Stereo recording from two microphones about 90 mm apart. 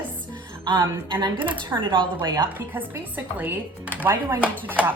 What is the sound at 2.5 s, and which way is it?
Speech, 20° right (ahead or behind).